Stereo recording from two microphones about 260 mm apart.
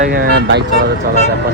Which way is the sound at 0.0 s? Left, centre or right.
Right.